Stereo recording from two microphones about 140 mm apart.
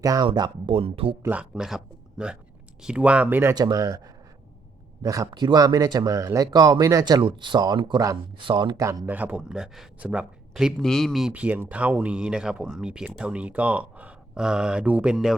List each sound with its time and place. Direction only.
0.0 s speech: 25° right (ahead or behind); by 1.1 s 40° right (ahead or behind)
1.2 s speech: 10° right (ahead or behind)
3.5 s speech: 30° right (ahead or behind)
8.8 s speech: 20° right (ahead or behind); by 15.4 s 5° right (ahead or behind)